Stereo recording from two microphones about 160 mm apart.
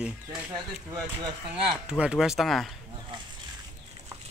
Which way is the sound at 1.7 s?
5° right (ahead or behind).